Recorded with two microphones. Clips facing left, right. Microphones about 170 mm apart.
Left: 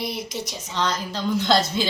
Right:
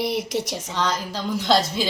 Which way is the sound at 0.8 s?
10° right (ahead or behind).